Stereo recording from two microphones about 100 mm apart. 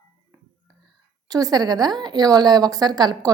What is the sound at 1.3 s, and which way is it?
A woman's voice, 40° right (ahead or behind).